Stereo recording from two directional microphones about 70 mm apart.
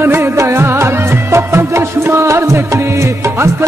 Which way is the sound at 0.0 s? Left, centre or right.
Right.